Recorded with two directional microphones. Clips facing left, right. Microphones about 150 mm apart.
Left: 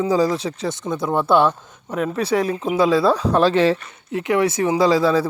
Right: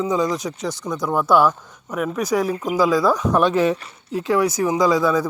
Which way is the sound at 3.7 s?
75° left (ahead or behind).